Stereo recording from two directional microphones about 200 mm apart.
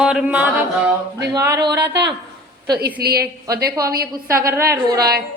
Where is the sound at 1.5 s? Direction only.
55° right (ahead or behind).